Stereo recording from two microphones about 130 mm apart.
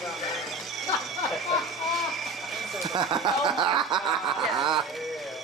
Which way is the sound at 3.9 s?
5° right (ahead or behind).